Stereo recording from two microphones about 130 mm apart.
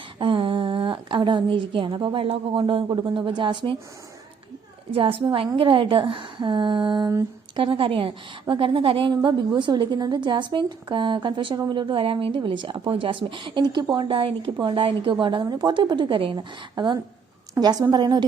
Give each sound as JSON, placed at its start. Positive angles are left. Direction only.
{"t": 0.2, "sound": "a woman's voice", "side_deg": -40}
{"t": 4.9, "sound": "a woman's voice", "side_deg": -45}